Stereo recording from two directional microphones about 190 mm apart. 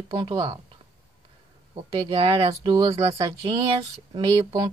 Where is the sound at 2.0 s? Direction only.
30° right (ahead or behind).